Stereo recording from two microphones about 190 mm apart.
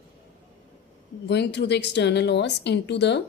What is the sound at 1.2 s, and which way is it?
A woman's voice, 65° left (ahead or behind).